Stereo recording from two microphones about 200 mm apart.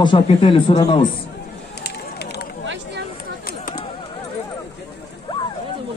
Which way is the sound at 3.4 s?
45° left (ahead or behind).